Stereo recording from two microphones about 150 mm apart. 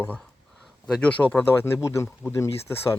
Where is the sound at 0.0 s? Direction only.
10° left (ahead or behind).